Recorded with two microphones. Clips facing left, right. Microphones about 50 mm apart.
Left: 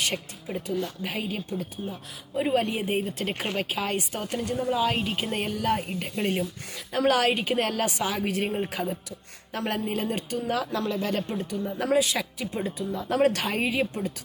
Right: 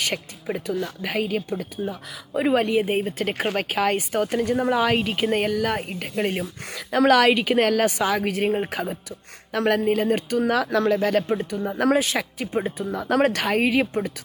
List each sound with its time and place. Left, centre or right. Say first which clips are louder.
0.1 s speech: right 4 dB; right
0.7 s speech: right 2 dB; right
1.8 s speech: right 6 dB; right
2.8 s speech: right 4 dB; right
3.5 s a woman's voice: right 6 dB; right
6.4 s a woman's voice: right 1 dB; right
8.7 s a woman's voice: right 2 dB; right
10.0 s a woman's voice: right 7 dB; right
10.3 s speech: right 6 dB; right
11.2 s speech: right 6 dB; right
11.5 s speech: right 4 dB; right
11.9 s a woman's voice: right 2 dB; right